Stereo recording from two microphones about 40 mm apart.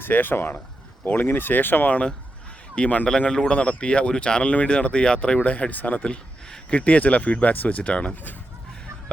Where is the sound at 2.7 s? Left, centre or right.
Left.